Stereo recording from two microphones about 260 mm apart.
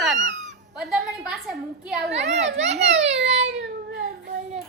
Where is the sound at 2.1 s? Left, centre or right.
Right.